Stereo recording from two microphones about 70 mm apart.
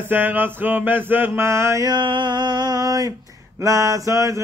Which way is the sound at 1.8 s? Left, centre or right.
Right.